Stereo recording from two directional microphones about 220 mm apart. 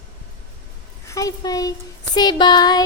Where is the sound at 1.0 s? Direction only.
15° left (ahead or behind).